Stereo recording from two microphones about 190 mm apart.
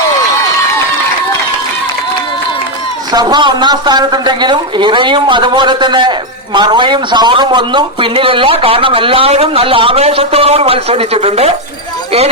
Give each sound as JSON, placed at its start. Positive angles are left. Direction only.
{"t": 3.1, "sound": "a man's voice", "side_deg": -20}